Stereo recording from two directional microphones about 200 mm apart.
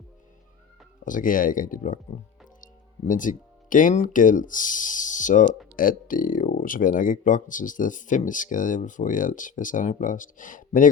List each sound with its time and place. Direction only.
1.0 s speech: 40° left (ahead or behind)